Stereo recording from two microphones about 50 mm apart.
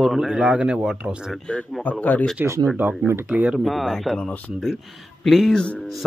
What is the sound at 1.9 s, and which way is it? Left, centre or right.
Speech, left.